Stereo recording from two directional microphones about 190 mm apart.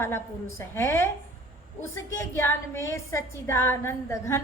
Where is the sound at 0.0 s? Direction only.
15° left (ahead or behind).